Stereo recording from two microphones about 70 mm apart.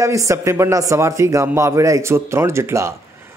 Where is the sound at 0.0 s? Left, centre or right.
Right.